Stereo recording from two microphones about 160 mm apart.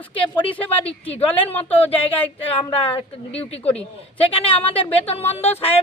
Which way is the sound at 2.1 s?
10° left (ahead or behind).